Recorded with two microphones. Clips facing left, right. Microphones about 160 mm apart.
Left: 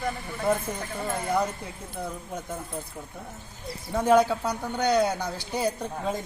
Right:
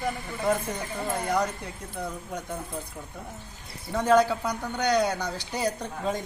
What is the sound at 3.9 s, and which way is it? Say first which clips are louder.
Speech: left 1 dB; 10° left (ahead or behind).